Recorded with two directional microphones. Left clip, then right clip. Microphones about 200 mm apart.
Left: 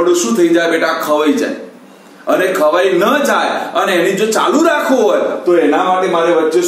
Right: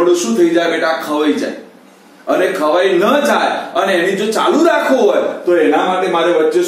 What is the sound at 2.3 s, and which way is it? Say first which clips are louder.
A man's voice: left 1 dB; 20° left (ahead or behind).